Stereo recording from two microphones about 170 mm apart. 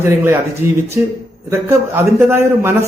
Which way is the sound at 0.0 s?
15° right (ahead or behind).